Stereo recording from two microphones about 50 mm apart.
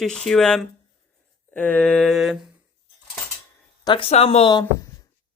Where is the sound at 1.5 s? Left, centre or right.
Left.